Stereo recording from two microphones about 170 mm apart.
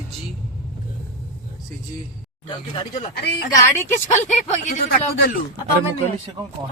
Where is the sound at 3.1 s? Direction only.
70° left (ahead or behind).